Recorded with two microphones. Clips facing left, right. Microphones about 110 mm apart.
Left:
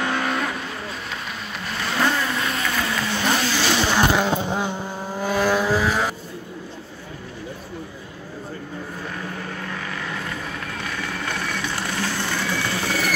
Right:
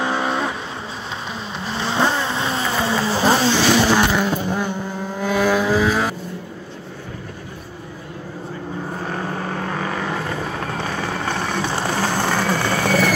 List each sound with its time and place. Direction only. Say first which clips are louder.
0.0 s vehicle: right 3 dB; 20° right (ahead or behind)
1.6 s vehicle: right 3 dB; 30° right (ahead or behind)
4.2 s vehicle: right 1 dB; 25° left (ahead or behind)
5.2 s vehicle: right 2 dB; 5° left (ahead or behind)
8.9 s vehicle: right 7 dB; 45° right (ahead or behind)